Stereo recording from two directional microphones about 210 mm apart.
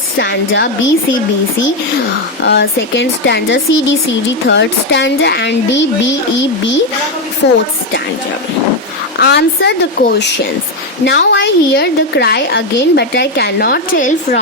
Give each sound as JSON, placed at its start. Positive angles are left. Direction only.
{"t": 0.2, "sound": "speech", "side_deg": 60}
{"t": 2.4, "sound": "speech", "side_deg": 55}
{"t": 7.4, "sound": "speech", "side_deg": 55}
{"t": 9.2, "sound": "a woman's voice", "side_deg": 55}